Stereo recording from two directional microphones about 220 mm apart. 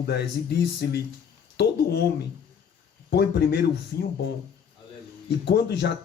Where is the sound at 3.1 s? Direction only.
45° left (ahead or behind).